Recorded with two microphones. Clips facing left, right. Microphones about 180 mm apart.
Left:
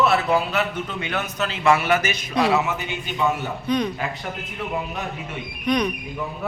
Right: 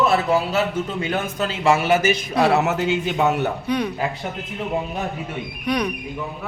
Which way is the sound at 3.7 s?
10° right (ahead or behind).